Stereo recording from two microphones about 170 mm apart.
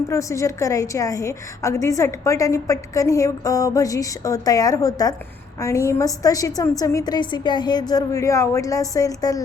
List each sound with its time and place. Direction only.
0.1 s a woman's voice: 20° left (ahead or behind)